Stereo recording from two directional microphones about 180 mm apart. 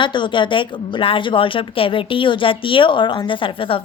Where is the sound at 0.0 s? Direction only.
25° left (ahead or behind).